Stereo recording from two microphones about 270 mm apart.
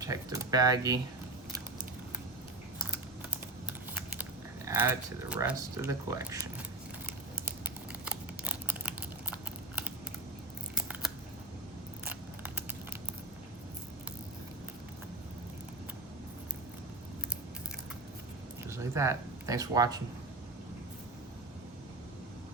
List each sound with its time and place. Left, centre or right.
0.0 s speech: centre
4.2 s speech: centre
7.6 s a sound: centre
10.8 s scissors: centre
18.7 s speech: centre